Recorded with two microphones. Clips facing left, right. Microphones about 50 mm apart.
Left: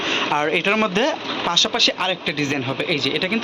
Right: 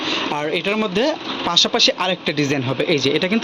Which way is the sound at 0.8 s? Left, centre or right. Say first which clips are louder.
Even; left.